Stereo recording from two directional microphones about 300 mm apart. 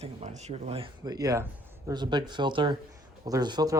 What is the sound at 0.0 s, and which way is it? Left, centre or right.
Speech, right.